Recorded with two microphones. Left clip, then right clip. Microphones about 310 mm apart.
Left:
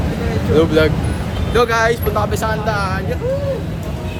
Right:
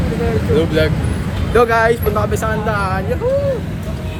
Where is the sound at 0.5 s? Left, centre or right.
Left.